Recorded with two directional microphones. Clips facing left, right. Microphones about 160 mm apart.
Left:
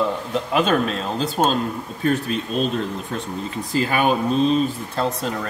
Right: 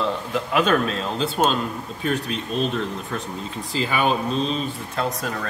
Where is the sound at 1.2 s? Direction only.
40° left (ahead or behind).